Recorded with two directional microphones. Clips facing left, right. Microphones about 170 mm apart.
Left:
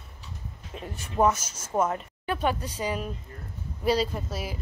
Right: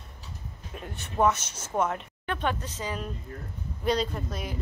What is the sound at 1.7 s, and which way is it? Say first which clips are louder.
A woman's voice: left 2 dB; 10° left (ahead or behind).